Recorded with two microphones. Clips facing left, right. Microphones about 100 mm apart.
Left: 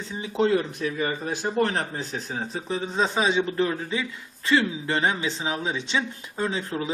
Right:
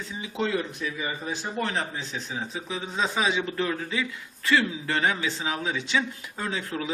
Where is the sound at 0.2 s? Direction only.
40° left (ahead or behind); by 1.5 s 55° left (ahead or behind).